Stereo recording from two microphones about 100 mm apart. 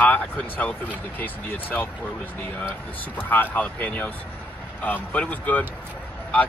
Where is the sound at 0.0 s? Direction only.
15° left (ahead or behind).